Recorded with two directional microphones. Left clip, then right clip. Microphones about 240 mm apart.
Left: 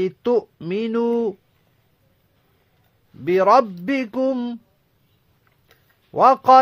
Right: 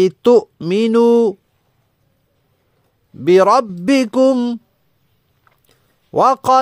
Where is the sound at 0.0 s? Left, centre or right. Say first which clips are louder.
Right 9 dB; right.